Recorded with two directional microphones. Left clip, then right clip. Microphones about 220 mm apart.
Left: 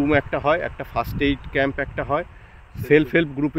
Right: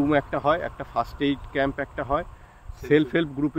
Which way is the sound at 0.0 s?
45° left (ahead or behind).